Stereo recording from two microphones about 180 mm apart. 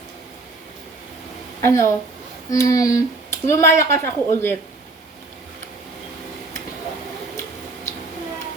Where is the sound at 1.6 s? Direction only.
15° left (ahead or behind).